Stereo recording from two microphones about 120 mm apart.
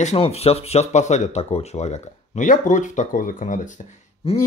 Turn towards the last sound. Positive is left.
turn(degrees=55)  # may be behind; listen again after turning